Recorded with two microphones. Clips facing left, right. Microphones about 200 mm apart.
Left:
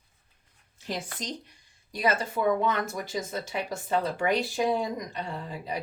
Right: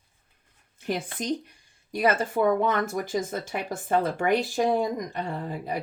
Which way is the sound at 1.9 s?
50° right (ahead or behind).